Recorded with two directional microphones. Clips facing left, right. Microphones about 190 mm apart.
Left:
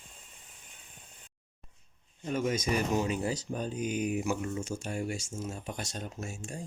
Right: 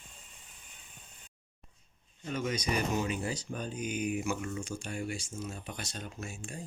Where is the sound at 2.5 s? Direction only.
45° left (ahead or behind).